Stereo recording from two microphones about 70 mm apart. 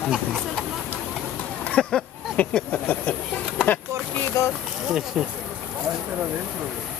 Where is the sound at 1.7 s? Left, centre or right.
Centre.